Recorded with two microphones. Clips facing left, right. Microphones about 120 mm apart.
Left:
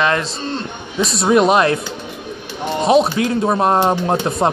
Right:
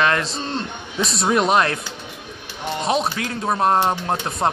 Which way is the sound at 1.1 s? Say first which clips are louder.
Left 5 dB; 10° left (ahead or behind).